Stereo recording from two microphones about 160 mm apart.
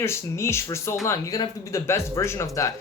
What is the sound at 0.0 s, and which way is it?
Speech, 15° left (ahead or behind).